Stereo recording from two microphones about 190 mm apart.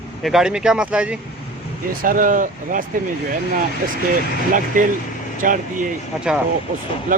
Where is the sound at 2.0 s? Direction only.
45° right (ahead or behind).